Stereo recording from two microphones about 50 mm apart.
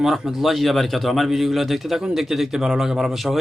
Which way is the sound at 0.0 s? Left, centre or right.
Centre.